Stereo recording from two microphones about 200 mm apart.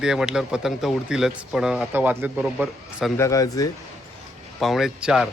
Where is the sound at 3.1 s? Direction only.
15° left (ahead or behind).